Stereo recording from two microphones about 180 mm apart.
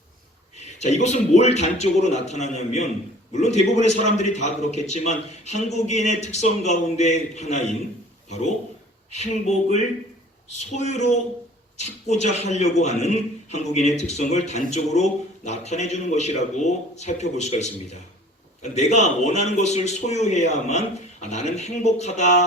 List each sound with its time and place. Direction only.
0.5 s a man's voice: 40° left (ahead or behind)
9.1 s a man's voice: 40° left (ahead or behind)